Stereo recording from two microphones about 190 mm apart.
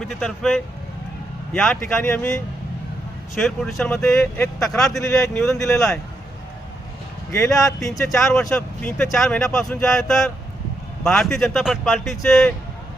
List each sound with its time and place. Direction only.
0.0 s speech: centre (ahead or behind)
4.9 s speech: 15° left (ahead or behind)
7.3 s speech: 15° left (ahead or behind)
8.3 s speech: 5° left (ahead or behind)